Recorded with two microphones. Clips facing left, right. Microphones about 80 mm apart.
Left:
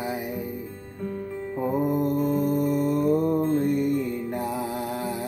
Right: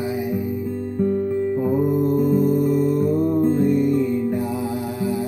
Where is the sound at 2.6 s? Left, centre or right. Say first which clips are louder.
Right 4 dB; left.